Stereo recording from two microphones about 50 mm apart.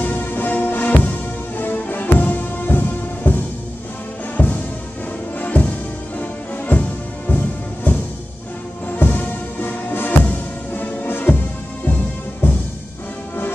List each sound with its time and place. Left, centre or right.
0.0 s music: left
4.4 s music: left
6.7 s music: left